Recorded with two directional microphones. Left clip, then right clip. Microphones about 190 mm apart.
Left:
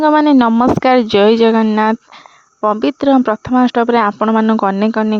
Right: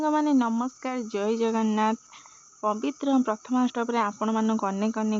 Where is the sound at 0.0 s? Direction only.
45° left (ahead or behind).